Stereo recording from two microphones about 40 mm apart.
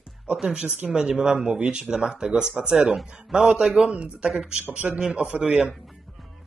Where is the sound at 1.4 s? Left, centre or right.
Right.